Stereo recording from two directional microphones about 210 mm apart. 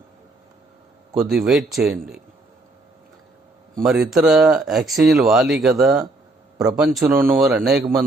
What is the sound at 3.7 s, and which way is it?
A man's voice, centre (ahead or behind).